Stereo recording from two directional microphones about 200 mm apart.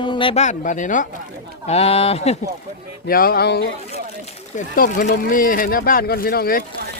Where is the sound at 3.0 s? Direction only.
50° left (ahead or behind).